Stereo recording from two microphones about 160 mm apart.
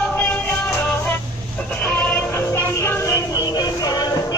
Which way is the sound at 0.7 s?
10° left (ahead or behind).